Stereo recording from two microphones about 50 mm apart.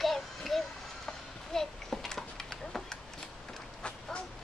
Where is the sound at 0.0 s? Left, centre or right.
Centre.